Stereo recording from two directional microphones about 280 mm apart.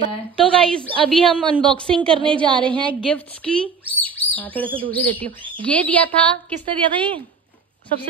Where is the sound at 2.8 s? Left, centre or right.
Centre.